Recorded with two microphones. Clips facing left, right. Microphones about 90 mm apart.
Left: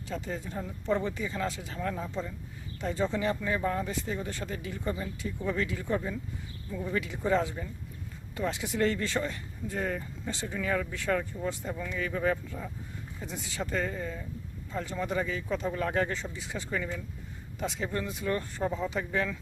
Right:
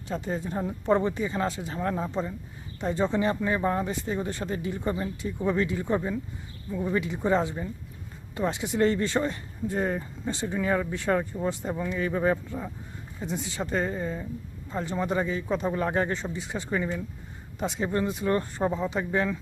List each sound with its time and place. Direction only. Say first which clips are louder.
0.1 s speech: right 5 dB; 35° right (ahead or behind)